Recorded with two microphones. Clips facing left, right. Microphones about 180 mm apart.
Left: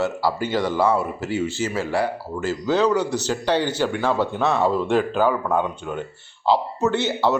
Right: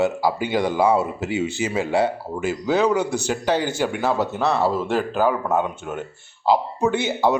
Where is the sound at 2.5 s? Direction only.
10° right (ahead or behind).